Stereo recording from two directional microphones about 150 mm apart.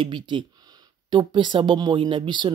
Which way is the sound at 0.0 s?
35° right (ahead or behind).